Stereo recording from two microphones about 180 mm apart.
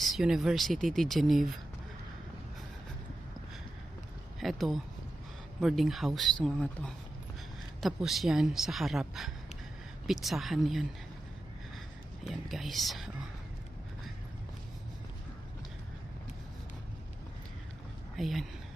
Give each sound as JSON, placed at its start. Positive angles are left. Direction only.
{"t": 0.0, "sound": "speech", "side_deg": 0}
{"t": 4.4, "sound": "speech", "side_deg": 0}
{"t": 12.2, "sound": "speech", "side_deg": 0}
{"t": 18.2, "sound": "speech", "side_deg": 0}